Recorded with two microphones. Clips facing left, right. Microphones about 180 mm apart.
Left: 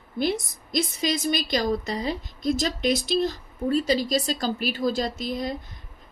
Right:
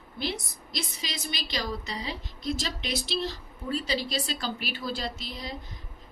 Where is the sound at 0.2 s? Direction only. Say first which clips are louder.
Left 8 dB; 50° left (ahead or behind).